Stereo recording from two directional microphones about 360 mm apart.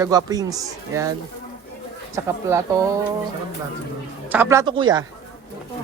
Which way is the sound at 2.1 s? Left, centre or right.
Centre.